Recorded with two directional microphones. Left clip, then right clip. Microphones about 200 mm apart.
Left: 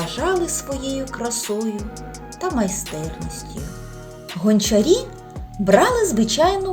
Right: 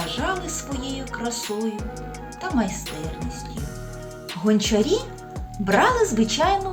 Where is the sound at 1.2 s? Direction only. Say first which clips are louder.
Left 3 dB; 45° left (ahead or behind).